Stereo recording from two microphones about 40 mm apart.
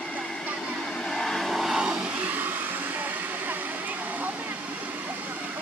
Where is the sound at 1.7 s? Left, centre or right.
Right.